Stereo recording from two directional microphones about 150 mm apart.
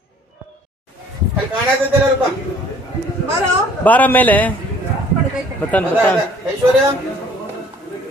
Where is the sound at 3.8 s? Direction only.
10° left (ahead or behind).